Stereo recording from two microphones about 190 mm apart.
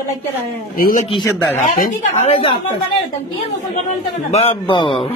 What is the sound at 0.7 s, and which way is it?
A woman's voice, 50° left (ahead or behind).